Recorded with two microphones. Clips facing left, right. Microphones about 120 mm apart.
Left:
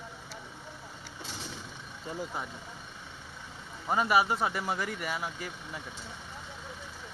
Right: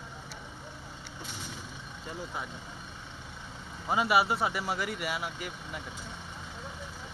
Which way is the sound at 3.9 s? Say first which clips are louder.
Even; 5° right (ahead or behind).